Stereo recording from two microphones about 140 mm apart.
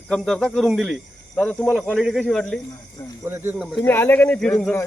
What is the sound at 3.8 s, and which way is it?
Speech, 15° left (ahead or behind).